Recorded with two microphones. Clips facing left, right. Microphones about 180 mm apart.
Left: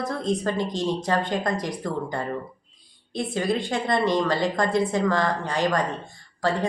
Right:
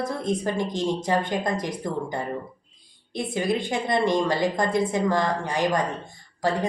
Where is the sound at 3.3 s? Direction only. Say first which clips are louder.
Even; 20° right (ahead or behind).